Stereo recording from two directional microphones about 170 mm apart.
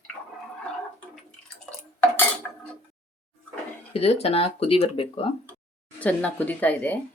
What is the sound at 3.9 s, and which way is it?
Speech, 35° left (ahead or behind).